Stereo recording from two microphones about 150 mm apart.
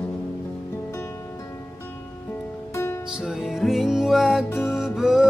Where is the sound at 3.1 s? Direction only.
5° right (ahead or behind).